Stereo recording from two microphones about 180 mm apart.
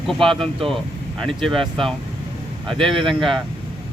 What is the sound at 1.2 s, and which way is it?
Speech, centre (ahead or behind).